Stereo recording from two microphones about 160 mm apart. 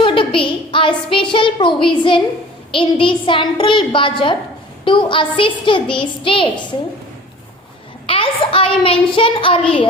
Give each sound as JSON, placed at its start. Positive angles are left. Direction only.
{"t": 0.0, "sound": "a woman's voice", "side_deg": 35}
{"t": 8.0, "sound": "a child's voice", "side_deg": 35}